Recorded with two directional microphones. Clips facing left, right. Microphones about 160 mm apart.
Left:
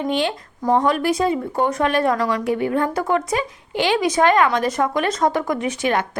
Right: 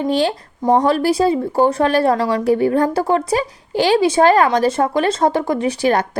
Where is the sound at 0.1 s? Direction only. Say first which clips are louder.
Right 4 dB; 35° right (ahead or behind).